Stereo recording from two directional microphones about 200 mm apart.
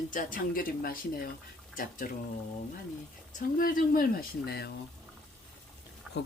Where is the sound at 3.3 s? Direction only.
45° left (ahead or behind).